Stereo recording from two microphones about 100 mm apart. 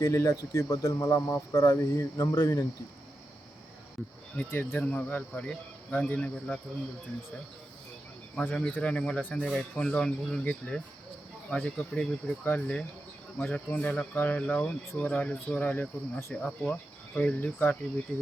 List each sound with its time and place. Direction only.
0.0 s speech: 30° left (ahead or behind)
4.4 s speech: 20° left (ahead or behind)
8.4 s speech: 10° left (ahead or behind)